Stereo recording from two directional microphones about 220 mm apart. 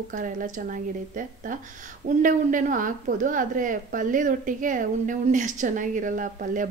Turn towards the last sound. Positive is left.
turn(degrees=-35)  # may be behind; listen again after turning